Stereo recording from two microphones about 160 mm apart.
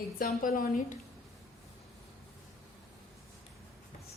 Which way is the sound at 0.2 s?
60° left (ahead or behind).